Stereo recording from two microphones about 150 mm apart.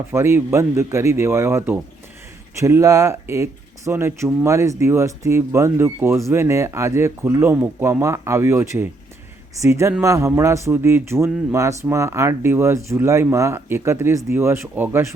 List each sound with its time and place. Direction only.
0.1 s speech: 15° right (ahead or behind)